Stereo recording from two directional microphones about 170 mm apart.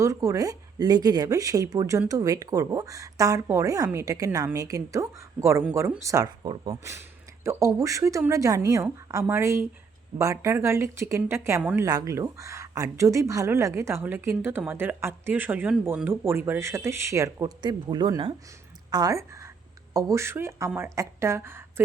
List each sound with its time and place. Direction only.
0.0 s a woman's voice: 20° right (ahead or behind)